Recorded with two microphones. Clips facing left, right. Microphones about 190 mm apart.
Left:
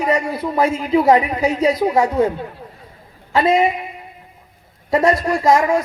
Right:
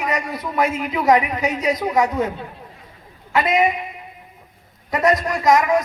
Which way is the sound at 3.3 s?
30° left (ahead or behind).